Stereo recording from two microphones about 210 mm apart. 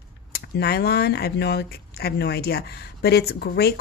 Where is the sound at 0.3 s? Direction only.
50° left (ahead or behind).